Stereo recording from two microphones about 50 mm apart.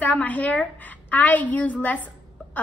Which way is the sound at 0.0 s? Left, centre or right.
Left.